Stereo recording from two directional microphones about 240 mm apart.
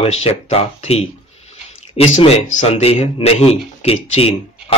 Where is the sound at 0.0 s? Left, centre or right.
Left.